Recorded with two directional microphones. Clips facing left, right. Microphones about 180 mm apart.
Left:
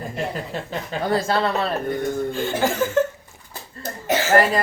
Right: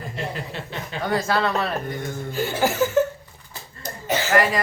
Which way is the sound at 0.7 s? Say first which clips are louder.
Left 2 dB; 30° left (ahead or behind).